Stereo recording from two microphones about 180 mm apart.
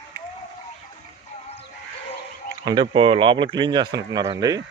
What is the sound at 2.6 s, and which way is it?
Speech, 30° right (ahead or behind).